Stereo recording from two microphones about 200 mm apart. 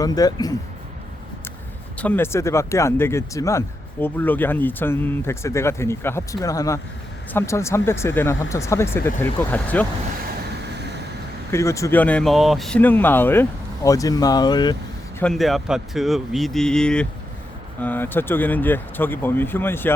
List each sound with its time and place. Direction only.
0.0 s speech: 20° left (ahead or behind)
2.0 s speech: 10° left (ahead or behind)
11.5 s speech: 15° left (ahead or behind)
15.2 s speech: centre (ahead or behind)